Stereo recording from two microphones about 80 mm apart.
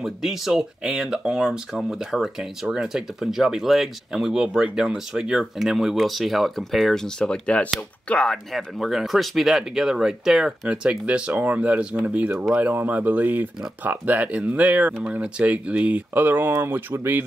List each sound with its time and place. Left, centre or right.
0.0 s speech: centre
10.7 s speech: centre